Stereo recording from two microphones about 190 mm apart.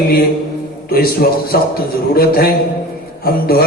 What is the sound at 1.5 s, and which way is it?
A man's voice, 55° left (ahead or behind).